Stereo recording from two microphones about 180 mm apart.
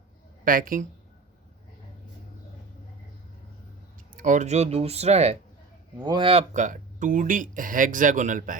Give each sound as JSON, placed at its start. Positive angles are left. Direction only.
{"t": 0.4, "sound": "speech", "side_deg": -50}
{"t": 4.2, "sound": "speech", "side_deg": -45}
{"t": 6.0, "sound": "speech", "side_deg": -25}